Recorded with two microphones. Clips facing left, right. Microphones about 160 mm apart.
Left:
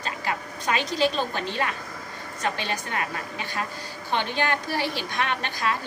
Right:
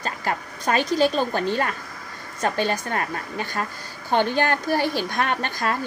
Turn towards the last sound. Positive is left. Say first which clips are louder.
# right 3 dB
turn(degrees=-45)  # may be behind; listen again after turning